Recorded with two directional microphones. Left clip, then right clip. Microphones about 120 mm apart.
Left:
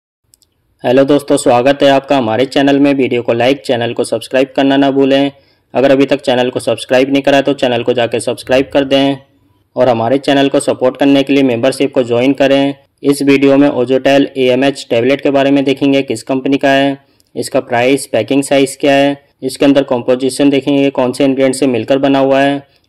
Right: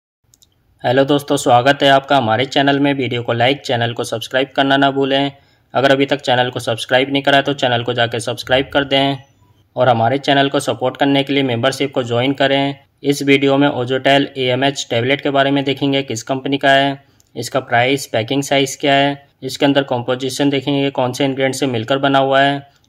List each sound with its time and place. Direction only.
0.8 s speech: 30° left (ahead or behind)